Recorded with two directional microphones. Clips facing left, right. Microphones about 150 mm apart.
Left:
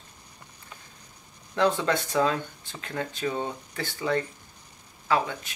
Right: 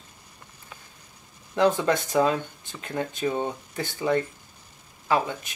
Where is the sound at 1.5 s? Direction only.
15° right (ahead or behind).